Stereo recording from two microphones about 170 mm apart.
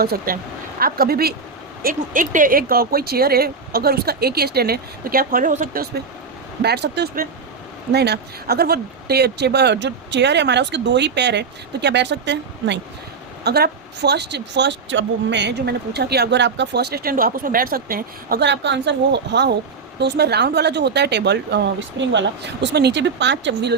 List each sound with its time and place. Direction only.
0.0 s speech: 65° right (ahead or behind)
6.6 s speech: 75° right (ahead or behind)
13.4 s speech: 70° right (ahead or behind); by 19.5 s 90° right
20.0 s speech: 80° right